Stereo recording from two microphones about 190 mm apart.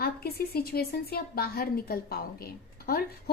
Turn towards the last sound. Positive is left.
turn(degrees=55)  # may be behind; listen again after turning